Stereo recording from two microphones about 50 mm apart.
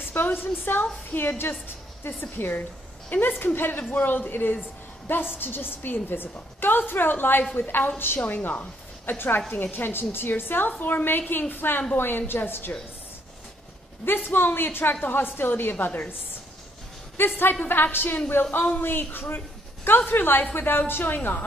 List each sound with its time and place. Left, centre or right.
0.1 s a woman's voice: left
2.3 s a woman's voice: left
14.0 s a woman's voice: left
17.2 s a woman's voice: left